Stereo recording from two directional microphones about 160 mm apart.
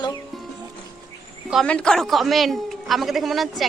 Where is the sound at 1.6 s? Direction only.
5° left (ahead or behind).